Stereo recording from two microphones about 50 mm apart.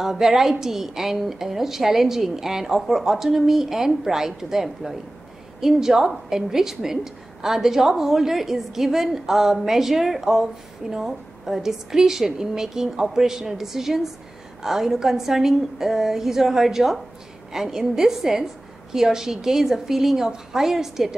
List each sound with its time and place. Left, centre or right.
0.0 s a woman's voice: centre